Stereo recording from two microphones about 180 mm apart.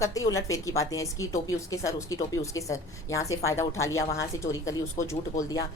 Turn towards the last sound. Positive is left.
turn(degrees=20)  # may be behind; listen again after turning